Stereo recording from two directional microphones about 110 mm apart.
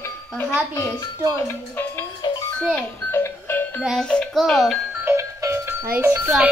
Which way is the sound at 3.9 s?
5° left (ahead or behind).